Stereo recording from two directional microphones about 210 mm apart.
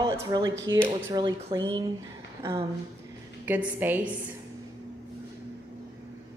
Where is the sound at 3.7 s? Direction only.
10° right (ahead or behind).